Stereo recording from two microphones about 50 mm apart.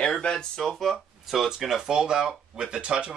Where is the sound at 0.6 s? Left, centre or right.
Centre.